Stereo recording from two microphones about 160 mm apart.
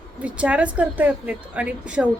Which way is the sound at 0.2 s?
10° right (ahead or behind).